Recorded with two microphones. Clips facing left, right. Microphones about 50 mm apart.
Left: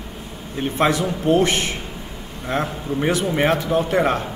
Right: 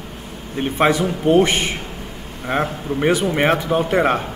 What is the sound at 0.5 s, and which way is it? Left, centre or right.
A man's voice, centre.